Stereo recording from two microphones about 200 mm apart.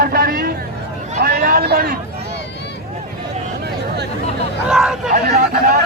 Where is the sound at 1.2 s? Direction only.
50° right (ahead or behind).